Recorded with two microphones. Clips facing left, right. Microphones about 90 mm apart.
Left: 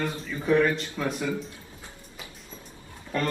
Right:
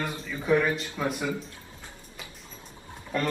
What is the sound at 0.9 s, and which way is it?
Speech, 15° right (ahead or behind).